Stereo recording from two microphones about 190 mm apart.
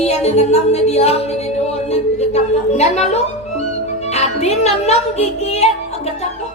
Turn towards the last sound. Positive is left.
turn(degrees=35)  # may be behind; listen again after turning